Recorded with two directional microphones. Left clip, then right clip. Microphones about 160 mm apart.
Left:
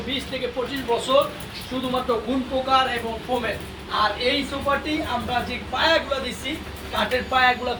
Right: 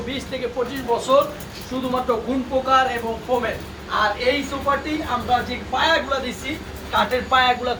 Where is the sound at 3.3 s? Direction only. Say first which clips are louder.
Right 4 dB; 5° right (ahead or behind).